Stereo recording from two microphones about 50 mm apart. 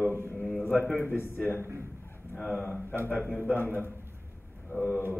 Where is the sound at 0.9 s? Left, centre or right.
Left.